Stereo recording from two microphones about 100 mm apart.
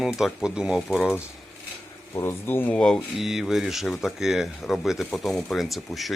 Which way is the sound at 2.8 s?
5° left (ahead or behind).